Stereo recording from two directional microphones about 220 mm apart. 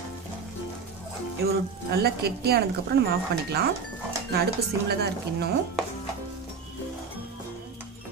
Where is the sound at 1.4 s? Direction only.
45° right (ahead or behind).